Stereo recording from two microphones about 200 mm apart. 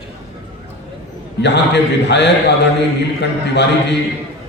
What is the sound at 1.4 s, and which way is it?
A man's voice, 60° left (ahead or behind).